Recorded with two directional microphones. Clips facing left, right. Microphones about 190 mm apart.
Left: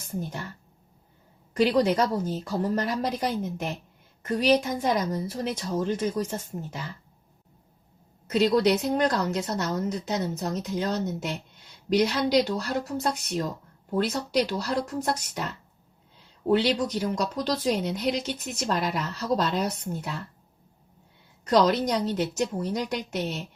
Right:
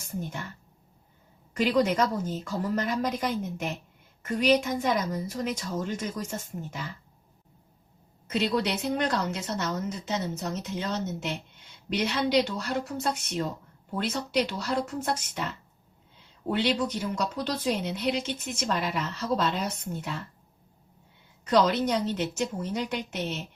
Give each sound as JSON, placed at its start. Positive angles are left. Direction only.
{"t": 0.2, "sound": "speech", "side_deg": 40}
{"t": 1.5, "sound": "speech", "side_deg": 35}
{"t": 8.3, "sound": "speech", "side_deg": 40}
{"t": 16.5, "sound": "speech", "side_deg": 40}
{"t": 21.4, "sound": "speech", "side_deg": 40}